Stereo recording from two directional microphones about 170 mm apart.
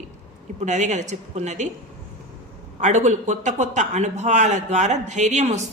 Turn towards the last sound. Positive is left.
turn(degrees=-45)  # may be behind; listen again after turning